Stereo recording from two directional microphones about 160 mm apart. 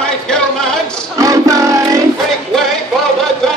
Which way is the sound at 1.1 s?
20° right (ahead or behind).